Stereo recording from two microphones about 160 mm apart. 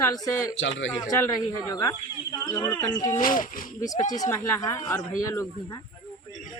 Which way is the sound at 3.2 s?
60° left (ahead or behind).